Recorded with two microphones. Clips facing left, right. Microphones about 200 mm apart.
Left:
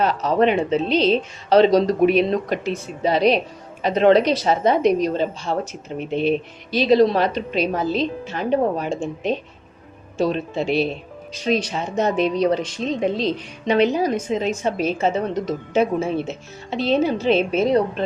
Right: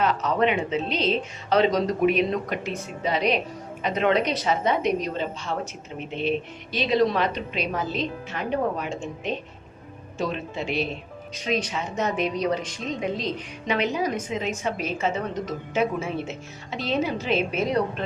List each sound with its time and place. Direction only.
0.0 s a woman's voice: 35° left (ahead or behind)